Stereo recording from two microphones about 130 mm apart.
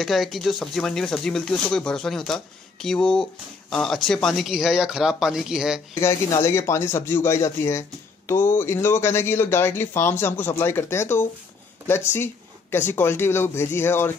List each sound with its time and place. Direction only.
0.0 s speech: centre (ahead or behind)
5.9 s speech: 20° left (ahead or behind)
12.7 s speech: 15° left (ahead or behind)